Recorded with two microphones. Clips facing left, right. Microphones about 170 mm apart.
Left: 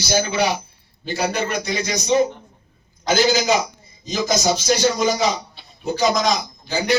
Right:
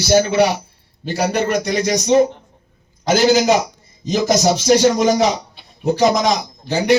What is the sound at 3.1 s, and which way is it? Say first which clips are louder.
A man's voice: right 4 dB; 70° right (ahead or behind).